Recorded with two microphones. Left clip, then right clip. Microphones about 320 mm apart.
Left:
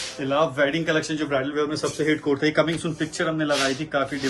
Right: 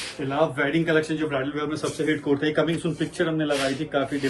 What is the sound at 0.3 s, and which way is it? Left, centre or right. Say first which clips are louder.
A man's voice: left 2 dB; left.